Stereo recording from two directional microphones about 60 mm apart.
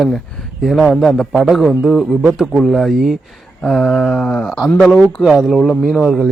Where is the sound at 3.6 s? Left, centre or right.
Centre.